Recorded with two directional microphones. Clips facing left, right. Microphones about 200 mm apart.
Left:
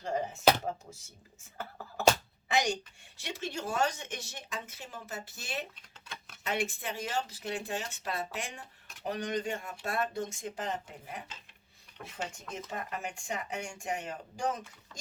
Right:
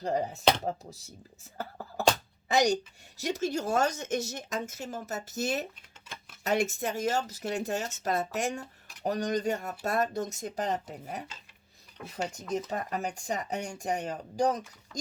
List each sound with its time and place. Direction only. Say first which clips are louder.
0.0 s speech: right 1 dB; 35° right (ahead or behind)
2.5 s a woman's voice: right 5 dB; 40° right (ahead or behind)